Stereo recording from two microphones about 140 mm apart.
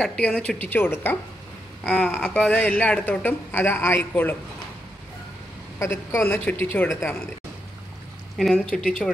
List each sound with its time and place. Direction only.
0.0 s speech: 5° left (ahead or behind)
5.8 s speech: 20° left (ahead or behind)
8.4 s speech: centre (ahead or behind)